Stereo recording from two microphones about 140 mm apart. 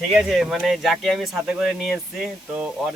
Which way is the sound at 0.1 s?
5° right (ahead or behind).